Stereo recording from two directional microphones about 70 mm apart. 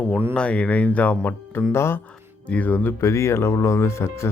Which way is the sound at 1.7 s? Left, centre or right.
Left.